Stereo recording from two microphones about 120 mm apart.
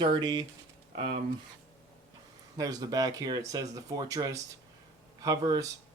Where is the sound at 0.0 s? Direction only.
35° right (ahead or behind).